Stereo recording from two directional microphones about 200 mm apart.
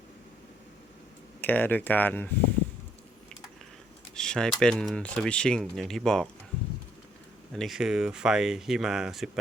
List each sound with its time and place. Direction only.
1.4 s speech: 10° left (ahead or behind)
4.1 s speech: 5° left (ahead or behind)
7.5 s speech: centre (ahead or behind)